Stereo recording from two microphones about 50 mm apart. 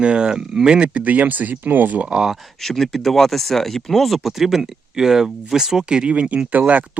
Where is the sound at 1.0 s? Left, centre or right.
Right.